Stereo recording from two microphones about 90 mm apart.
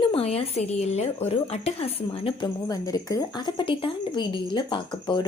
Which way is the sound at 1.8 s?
85° left.